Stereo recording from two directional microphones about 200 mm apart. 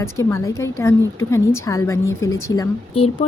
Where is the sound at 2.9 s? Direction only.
30° left (ahead or behind).